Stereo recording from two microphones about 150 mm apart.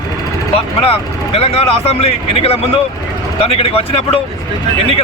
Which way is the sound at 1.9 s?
40° left (ahead or behind).